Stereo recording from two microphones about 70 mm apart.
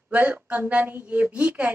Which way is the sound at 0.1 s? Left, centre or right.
Right.